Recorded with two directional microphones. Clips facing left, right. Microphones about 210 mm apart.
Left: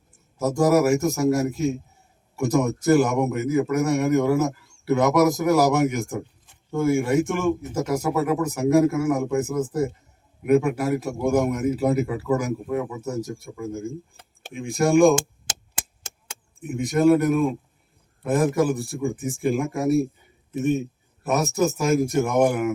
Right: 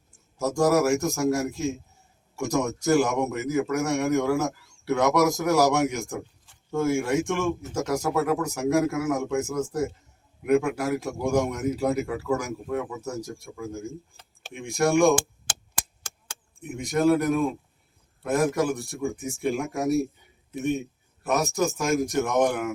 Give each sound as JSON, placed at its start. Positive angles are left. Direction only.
{"t": 0.3, "sound": "a man's voice", "side_deg": 0}
{"t": 15.1, "sound": "a sound", "side_deg": 25}
{"t": 16.6, "sound": "a man's voice", "side_deg": 0}